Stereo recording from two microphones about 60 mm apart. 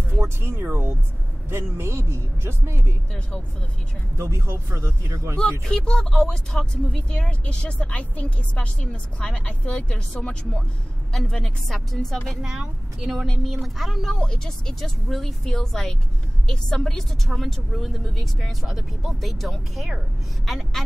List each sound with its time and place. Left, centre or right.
0.2 s speech: right
4.2 s speech: right
5.7 s speech: centre
12.4 s speech: centre
14.1 s speech: centre